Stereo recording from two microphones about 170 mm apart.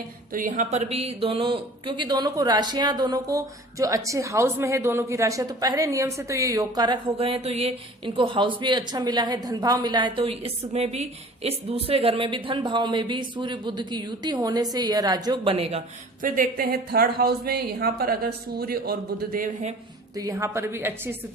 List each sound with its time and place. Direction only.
0.3 s speech: 50° right (ahead or behind)
16.2 s speech: 55° right (ahead or behind)
20.1 s a woman's voice: 20° right (ahead or behind)